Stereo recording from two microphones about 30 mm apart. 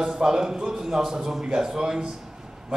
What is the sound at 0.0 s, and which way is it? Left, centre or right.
A man's voice, right.